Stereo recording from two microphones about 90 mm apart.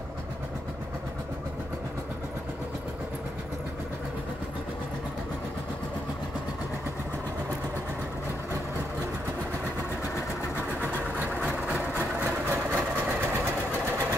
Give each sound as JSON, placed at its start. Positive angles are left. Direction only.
{"t": 10.8, "sound": "vehicle", "side_deg": -20}
{"t": 11.4, "sound": "engine", "side_deg": -5}
{"t": 12.2, "sound": "engine", "side_deg": -15}